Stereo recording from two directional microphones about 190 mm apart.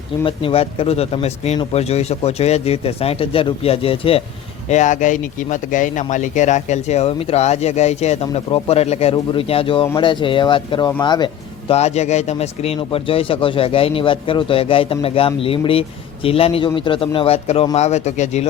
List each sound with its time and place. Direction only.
0.3 s a man's voice: 30° left (ahead or behind)
4.7 s a man's voice: 40° left (ahead or behind); by 11.3 s 25° left (ahead or behind)
11.7 s a man's voice: 35° left (ahead or behind)